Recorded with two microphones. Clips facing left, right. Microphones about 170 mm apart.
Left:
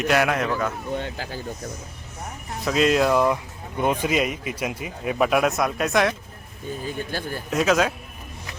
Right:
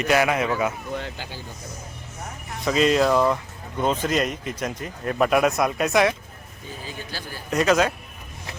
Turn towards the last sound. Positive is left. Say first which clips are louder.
# right 1 dB
turn(degrees=0)  # may be behind; listen again after turning